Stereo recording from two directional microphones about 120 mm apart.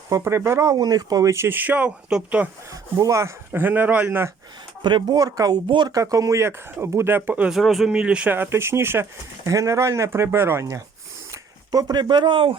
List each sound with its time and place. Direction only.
0.1 s speech: 25° right (ahead or behind); by 2.5 s 10° right (ahead or behind)
2.6 s speech: 25° right (ahead or behind)
4.8 s speech: 40° right (ahead or behind)